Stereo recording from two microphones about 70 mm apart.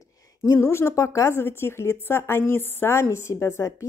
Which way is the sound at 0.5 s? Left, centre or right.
Left.